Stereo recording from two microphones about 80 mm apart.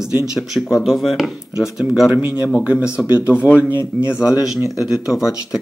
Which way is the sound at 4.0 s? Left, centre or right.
Centre.